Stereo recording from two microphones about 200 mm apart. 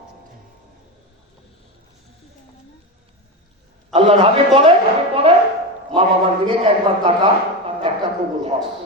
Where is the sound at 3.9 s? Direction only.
30° right (ahead or behind).